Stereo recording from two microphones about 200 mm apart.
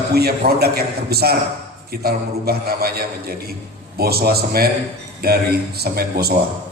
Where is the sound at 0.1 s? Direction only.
50° right (ahead or behind).